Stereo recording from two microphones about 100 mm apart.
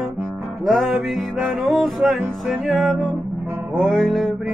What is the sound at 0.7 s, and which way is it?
Music, centre (ahead or behind).